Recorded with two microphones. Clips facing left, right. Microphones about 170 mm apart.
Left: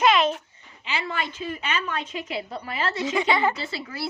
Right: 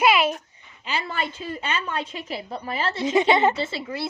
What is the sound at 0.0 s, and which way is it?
Babbling, 10° right (ahead or behind).